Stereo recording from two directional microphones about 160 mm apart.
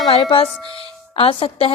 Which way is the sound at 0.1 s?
35° left (ahead or behind).